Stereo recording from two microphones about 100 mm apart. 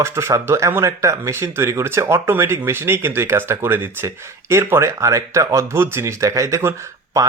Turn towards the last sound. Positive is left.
turn(degrees=-30)  # may be behind; listen again after turning